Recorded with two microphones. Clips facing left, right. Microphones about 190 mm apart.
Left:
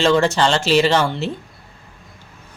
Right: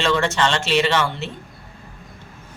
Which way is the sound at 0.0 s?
35° left (ahead or behind).